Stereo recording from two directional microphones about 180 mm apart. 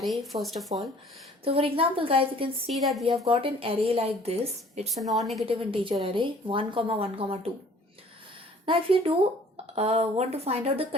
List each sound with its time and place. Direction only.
0.3 s speech: centre (ahead or behind)
1.5 s a woman's voice: 30° right (ahead or behind)
2.7 s speech: centre (ahead or behind)
3.1 s a woman's voice: 30° right (ahead or behind)
4.9 s speech: centre (ahead or behind)
5.5 s a woman's voice: 30° right (ahead or behind)
8.6 s a woman's voice: 30° right (ahead or behind)